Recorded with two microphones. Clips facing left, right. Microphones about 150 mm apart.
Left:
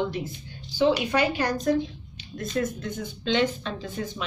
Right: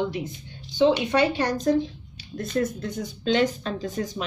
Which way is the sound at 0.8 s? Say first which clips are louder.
Right 2 dB; 25° right (ahead or behind).